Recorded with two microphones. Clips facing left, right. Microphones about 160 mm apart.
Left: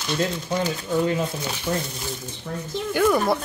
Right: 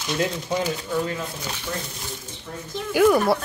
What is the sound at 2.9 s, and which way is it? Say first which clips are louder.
Speech: right 3 dB; 5° right (ahead or behind).